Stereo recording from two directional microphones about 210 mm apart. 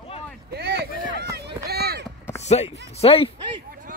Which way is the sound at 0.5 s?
50° right (ahead or behind).